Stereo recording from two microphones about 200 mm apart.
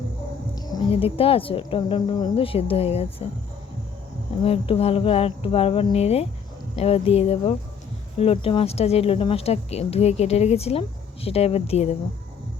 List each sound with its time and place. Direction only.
0.5 s speech: 20° left (ahead or behind)
4.4 s a woman's voice: 30° left (ahead or behind)